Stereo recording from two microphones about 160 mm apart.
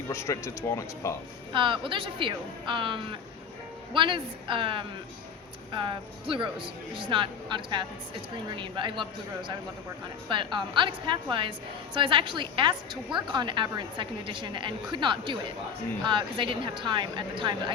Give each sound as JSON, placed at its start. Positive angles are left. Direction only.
{"t": 0.1, "sound": "speech", "side_deg": 15}
{"t": 1.5, "sound": "a woman's voice", "side_deg": -30}